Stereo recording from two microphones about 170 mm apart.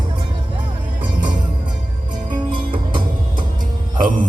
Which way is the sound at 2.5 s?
30° right (ahead or behind).